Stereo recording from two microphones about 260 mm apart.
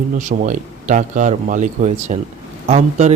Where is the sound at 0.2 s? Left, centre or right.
Right.